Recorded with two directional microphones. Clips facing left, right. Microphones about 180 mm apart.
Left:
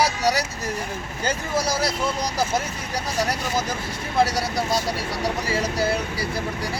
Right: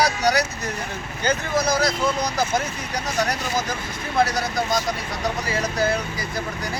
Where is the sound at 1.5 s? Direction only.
5° left (ahead or behind).